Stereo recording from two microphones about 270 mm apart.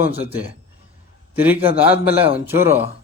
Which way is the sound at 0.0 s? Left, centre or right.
Centre.